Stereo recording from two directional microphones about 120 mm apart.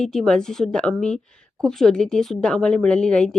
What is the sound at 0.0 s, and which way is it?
A woman's voice, 5° left (ahead or behind).